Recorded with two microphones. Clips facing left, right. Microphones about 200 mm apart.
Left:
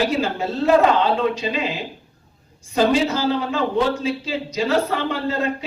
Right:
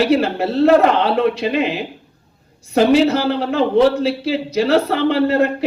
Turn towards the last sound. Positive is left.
turn(degrees=-65)  # may be behind; listen again after turning